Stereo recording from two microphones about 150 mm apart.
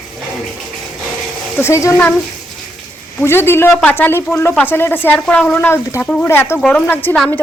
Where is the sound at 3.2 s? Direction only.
15° left (ahead or behind).